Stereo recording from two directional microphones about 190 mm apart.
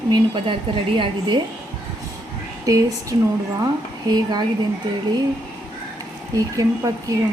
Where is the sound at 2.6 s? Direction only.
15° right (ahead or behind).